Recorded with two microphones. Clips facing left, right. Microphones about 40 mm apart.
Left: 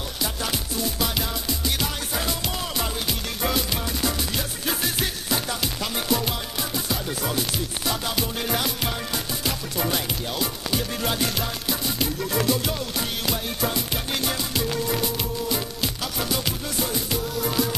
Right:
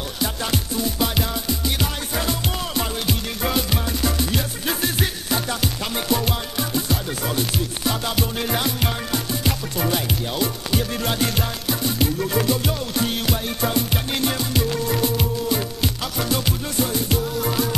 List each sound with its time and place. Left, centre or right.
0.4 s music: centre
9.8 s music: centre
14.2 s music: centre
17.4 s music: centre